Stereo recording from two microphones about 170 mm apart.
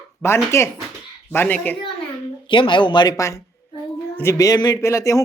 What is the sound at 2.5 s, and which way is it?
Speech, 30° left (ahead or behind).